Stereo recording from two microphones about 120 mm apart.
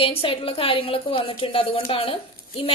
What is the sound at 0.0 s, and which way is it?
A woman's voice, 50° left (ahead or behind).